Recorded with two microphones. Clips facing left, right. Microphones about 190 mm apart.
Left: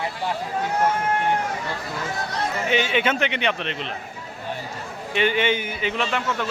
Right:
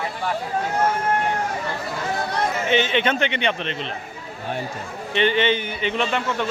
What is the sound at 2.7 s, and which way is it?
A man's voice, 5° left (ahead or behind).